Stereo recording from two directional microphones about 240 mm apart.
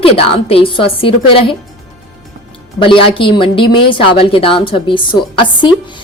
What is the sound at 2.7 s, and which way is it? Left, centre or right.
A woman's voice, left.